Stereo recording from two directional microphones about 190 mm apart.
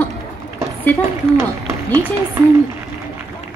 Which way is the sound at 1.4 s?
15° right (ahead or behind).